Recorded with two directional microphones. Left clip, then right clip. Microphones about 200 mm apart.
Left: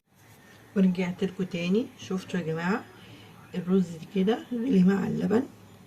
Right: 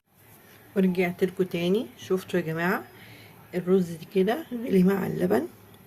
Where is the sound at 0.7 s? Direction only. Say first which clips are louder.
Right 3 dB; 35° right (ahead or behind).